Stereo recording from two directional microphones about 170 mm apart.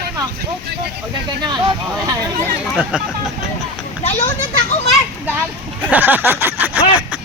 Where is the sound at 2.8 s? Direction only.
5° right (ahead or behind).